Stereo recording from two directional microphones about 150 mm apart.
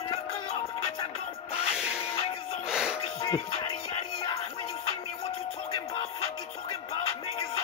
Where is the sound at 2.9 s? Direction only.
40° left (ahead or behind).